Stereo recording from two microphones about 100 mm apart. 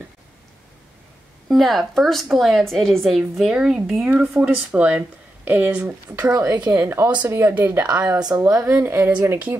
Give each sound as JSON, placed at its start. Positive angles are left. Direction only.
{"t": 1.5, "sound": "speech", "side_deg": 0}
{"t": 4.0, "sound": "speech", "side_deg": -15}
{"t": 6.3, "sound": "speech", "side_deg": -35}
{"t": 8.2, "sound": "speech", "side_deg": -35}
{"t": 8.6, "sound": "speech", "side_deg": -25}